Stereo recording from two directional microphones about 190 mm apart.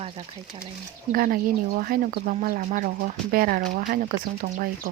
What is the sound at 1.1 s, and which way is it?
Speech, 50° right (ahead or behind).